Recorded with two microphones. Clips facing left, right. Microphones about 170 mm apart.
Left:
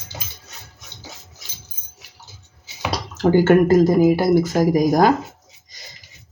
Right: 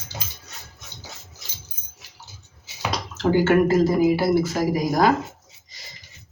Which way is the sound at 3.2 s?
45° left (ahead or behind).